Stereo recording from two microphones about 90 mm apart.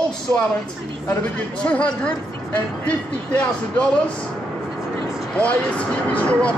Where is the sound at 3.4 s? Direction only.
15° left (ahead or behind).